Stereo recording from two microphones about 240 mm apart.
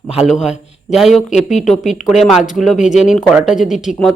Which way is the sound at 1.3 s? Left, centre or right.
Left.